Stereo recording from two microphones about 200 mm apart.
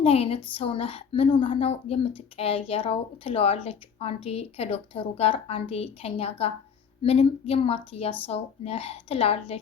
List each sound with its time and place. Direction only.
0.0 s a woman's voice: 30° left (ahead or behind)